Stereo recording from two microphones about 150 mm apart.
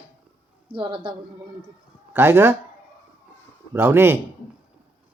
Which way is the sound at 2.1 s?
15° right (ahead or behind).